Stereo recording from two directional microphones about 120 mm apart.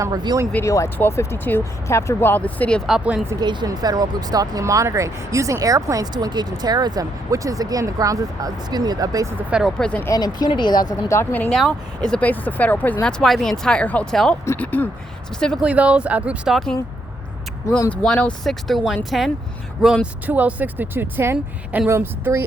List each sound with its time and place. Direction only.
0.0 s speech: 35° right (ahead or behind)
0.6 s speech: 25° left (ahead or behind)
2.8 s speech: 5° right (ahead or behind)
3.4 s speech: 40° right (ahead or behind)
9.5 s speech: 5° right (ahead or behind)
9.7 s speech: 5° left (ahead or behind)
10.2 s speech: 35° left (ahead or behind)
11.1 s speech: 15° left (ahead or behind)
15.6 s speech: 10° right (ahead or behind)
17.9 s speech: 10° left (ahead or behind)
20.2 s speech: 15° right (ahead or behind)